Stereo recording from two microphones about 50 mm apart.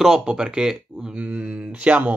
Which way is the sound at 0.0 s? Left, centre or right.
Centre.